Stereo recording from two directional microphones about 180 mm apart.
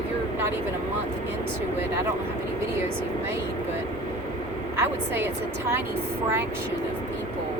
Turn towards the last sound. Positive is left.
turn(degrees=-10)  # may be behind; listen again after turning